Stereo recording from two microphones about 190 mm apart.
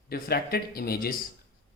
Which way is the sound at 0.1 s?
55° left (ahead or behind).